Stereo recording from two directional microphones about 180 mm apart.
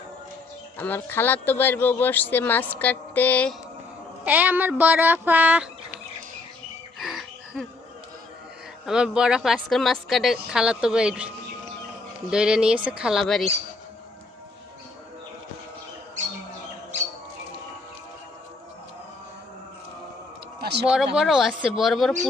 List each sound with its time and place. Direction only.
0.8 s speech: 10° left (ahead or behind)
4.2 s speech: 10° right (ahead or behind)
7.0 s a sound: centre (ahead or behind)
8.9 s a woman's voice: 5° right (ahead or behind)
12.3 s a woman's voice: 5° right (ahead or behind)
20.6 s a sound: 70° right (ahead or behind)
20.8 s a woman's voice: 5° right (ahead or behind)